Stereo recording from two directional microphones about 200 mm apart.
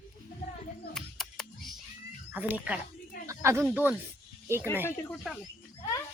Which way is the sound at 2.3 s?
10° right (ahead or behind).